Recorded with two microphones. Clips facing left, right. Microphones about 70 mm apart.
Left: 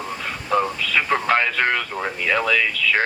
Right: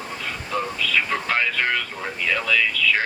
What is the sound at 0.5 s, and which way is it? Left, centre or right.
Speech, left.